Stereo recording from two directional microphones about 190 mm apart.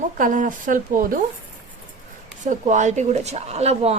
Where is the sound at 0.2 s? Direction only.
40° right (ahead or behind).